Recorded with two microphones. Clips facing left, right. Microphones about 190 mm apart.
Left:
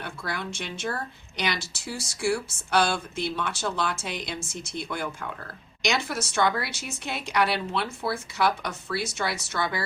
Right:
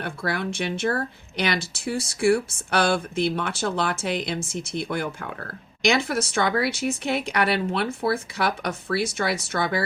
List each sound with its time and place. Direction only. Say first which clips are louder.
0.0 s speech: right 6 dB; 55° right (ahead or behind)